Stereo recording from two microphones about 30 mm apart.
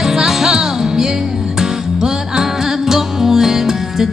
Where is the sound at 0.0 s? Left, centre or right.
Centre.